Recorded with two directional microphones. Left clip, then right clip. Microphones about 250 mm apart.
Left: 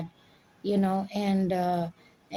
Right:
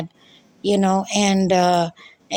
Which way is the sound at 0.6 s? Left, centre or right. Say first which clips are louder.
Right 9 dB; right.